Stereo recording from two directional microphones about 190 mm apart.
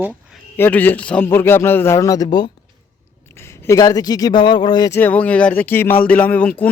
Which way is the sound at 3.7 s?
20° left (ahead or behind).